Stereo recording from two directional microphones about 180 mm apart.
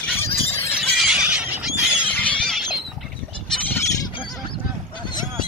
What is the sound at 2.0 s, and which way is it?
Squeal, 10° left (ahead or behind).